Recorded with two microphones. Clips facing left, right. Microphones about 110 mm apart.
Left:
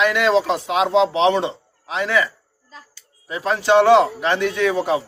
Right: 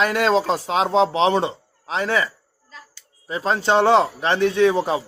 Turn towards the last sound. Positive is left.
turn(degrees=-30)  # may be behind; listen again after turning